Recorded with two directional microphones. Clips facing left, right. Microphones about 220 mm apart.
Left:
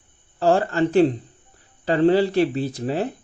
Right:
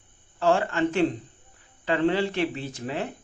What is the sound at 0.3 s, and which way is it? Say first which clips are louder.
Speech: left 4 dB; 35° left (ahead or behind).